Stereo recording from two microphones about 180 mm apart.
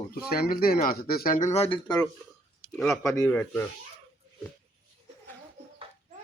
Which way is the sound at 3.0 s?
15° left (ahead or behind).